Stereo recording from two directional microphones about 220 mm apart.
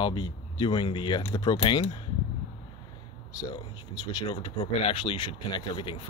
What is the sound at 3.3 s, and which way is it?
Speech, 15° left (ahead or behind).